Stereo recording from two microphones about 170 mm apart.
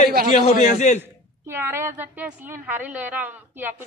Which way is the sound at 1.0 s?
15° right (ahead or behind).